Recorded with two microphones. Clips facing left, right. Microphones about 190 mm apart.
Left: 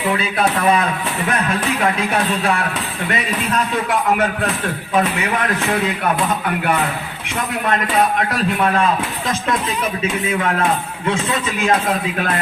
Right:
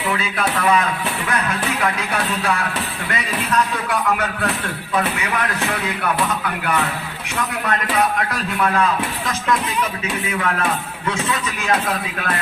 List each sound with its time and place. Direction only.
0.1 s speech: 30° left (ahead or behind)
8.6 s speech: 30° left (ahead or behind)
11.0 s speech: 25° left (ahead or behind)